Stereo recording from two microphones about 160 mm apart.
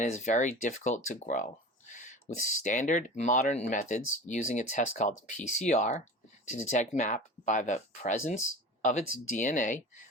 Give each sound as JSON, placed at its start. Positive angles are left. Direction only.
{"t": 0.0, "sound": "speech", "side_deg": 45}